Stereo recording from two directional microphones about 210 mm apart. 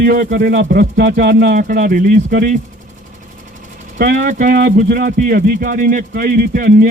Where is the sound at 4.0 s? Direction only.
40° right (ahead or behind).